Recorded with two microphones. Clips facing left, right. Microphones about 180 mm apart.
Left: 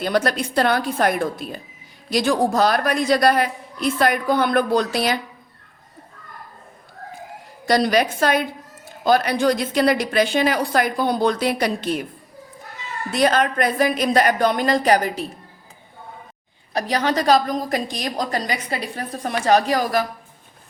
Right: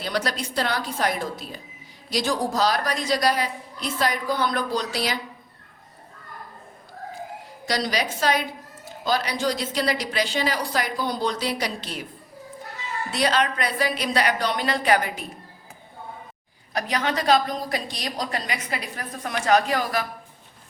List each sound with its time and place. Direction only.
0.0 s a man's voice: 50° left (ahead or behind)
7.7 s a woman's voice: 55° left (ahead or behind)
13.1 s a woman's voice: 50° left (ahead or behind)
16.7 s a woman's voice: 35° left (ahead or behind)